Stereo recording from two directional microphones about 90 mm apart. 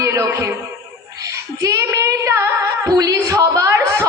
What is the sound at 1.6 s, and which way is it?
Female singing, 35° right (ahead or behind).